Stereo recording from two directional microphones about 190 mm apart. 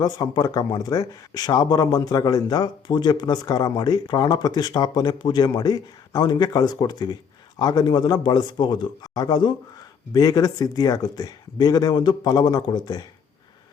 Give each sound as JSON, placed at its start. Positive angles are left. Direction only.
{"t": 0.0, "sound": "speech", "side_deg": 20}